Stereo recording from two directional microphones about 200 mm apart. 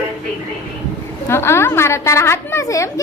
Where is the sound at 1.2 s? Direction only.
10° left (ahead or behind).